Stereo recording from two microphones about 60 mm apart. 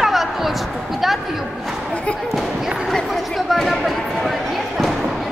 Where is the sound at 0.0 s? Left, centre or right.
Centre.